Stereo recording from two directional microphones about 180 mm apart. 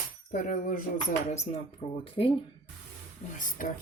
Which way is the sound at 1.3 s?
35° left (ahead or behind).